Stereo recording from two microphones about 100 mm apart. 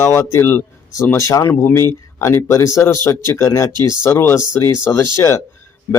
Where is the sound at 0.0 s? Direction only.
30° left (ahead or behind).